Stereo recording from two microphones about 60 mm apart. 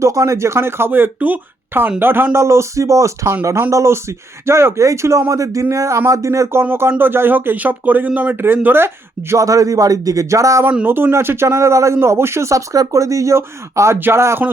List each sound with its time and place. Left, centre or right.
0.0 s speech: right
2.4 s speech: right
8.6 s speech: right
9.3 s speech: right
10.8 s speech: right